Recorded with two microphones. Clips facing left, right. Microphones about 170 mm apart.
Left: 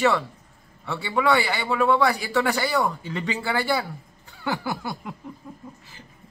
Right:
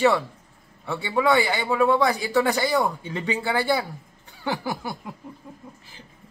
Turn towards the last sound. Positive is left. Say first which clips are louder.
# even
turn(degrees=-20)  # may be behind; listen again after turning